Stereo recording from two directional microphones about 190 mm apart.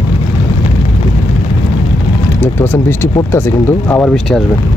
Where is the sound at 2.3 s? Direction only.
10° left (ahead or behind).